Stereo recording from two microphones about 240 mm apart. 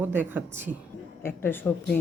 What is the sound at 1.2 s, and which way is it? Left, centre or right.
Speech, centre.